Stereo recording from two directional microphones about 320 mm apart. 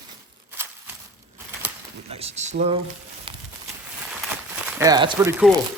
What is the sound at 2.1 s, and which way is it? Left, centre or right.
Speech, centre.